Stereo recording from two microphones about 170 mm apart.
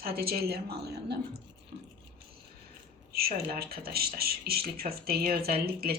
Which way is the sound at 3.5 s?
65° right (ahead or behind).